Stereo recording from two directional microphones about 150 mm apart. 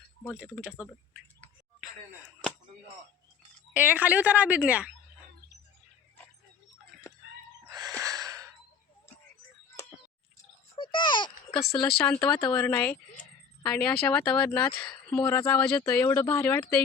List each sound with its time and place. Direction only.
0.3 s speech: 5° right (ahead or behind)
3.8 s a woman's voice: 10° right (ahead or behind)
7.7 s a sound: 25° right (ahead or behind)
8.0 s gasp: 25° right (ahead or behind)
10.8 s a sound: 30° left (ahead or behind)
11.8 s speech: 5° left (ahead or behind)